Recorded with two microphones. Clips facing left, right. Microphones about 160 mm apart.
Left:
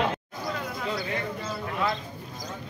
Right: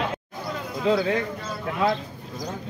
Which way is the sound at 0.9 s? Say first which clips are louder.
Right 12 dB; 90° right.